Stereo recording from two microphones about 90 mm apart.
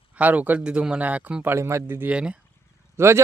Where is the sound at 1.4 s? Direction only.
30° right (ahead or behind).